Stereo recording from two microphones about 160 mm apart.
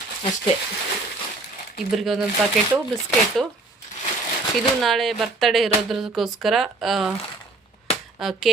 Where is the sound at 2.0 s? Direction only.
Centre (ahead or behind).